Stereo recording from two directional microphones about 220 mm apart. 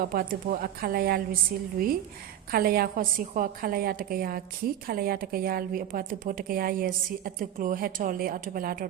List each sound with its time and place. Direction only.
0.0 s a woman's voice: 40° right (ahead or behind)
2.5 s a woman's voice: 45° right (ahead or behind)